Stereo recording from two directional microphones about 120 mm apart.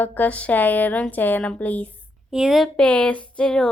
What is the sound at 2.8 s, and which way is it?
Speech, 10° left (ahead or behind).